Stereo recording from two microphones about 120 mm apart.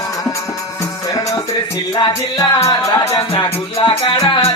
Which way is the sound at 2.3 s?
25° left (ahead or behind).